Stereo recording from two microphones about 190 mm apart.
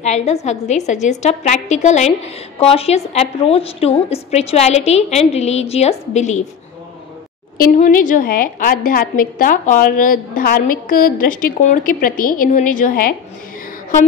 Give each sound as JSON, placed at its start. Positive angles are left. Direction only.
{"t": 0.0, "sound": "a woman's voice", "side_deg": 35}
{"t": 7.5, "sound": "a woman's voice", "side_deg": 50}